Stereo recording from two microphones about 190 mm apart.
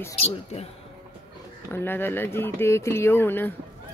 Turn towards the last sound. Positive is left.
turn(degrees=10)  # may be behind; listen again after turning